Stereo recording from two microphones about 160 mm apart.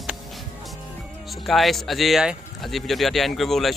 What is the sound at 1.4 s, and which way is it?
A man's voice, centre (ahead or behind).